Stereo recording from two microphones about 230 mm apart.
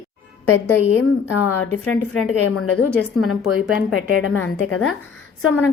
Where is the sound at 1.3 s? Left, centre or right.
Left.